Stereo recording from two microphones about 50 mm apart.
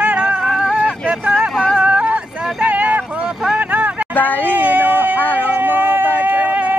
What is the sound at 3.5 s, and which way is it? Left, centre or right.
Vehicle, right.